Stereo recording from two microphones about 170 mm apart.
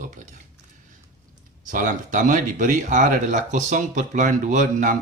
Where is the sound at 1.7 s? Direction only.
50° right (ahead or behind).